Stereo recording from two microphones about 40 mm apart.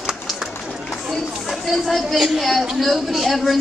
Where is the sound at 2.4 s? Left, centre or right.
Centre.